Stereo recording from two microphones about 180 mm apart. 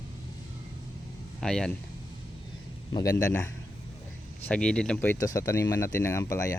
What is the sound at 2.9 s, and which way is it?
Speech, 20° left (ahead or behind).